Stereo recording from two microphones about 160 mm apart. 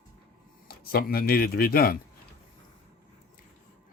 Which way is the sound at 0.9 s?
70° left (ahead or behind).